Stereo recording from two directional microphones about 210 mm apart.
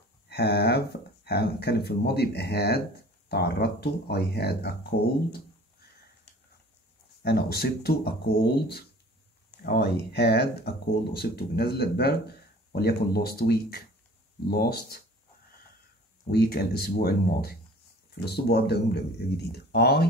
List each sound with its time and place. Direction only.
0.3 s speech: 50° left (ahead or behind)
7.2 s speech: 50° left (ahead or behind)
16.3 s speech: 45° left (ahead or behind)